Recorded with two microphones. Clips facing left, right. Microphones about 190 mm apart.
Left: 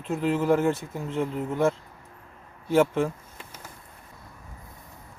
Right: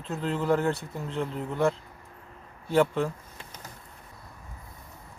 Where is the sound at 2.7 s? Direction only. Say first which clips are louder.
Left 2 dB; 10° left (ahead or behind).